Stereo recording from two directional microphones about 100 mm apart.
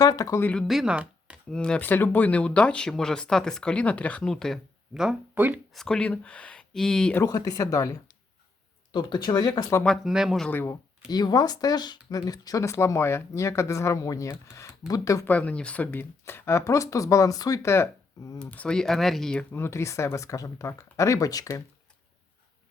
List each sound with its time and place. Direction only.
0.0 s speech: 35° left (ahead or behind)
0.7 s speech: 5° right (ahead or behind)
1.5 s speech: 10° left (ahead or behind)
5.3 s speech: 15° right (ahead or behind)
5.7 s speech: 5° left (ahead or behind)
7.3 s speech: 40° left (ahead or behind)
8.9 s speech: 50° left (ahead or behind)
9.8 s speech: 5° left (ahead or behind)
10.5 s speech: 20° left (ahead or behind)
11.1 s speech: 40° left (ahead or behind)
15.2 s speech: 15° left (ahead or behind)
18.3 s speech: 10° left (ahead or behind)
19.5 s speech: 25° left (ahead or behind)